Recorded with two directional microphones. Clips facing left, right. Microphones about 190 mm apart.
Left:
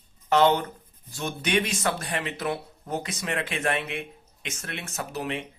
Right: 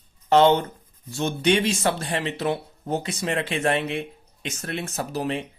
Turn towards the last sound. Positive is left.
turn(degrees=-35)  # may be behind; listen again after turning